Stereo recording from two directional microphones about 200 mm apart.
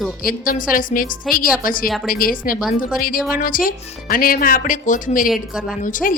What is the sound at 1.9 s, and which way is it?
Speech, centre (ahead or behind).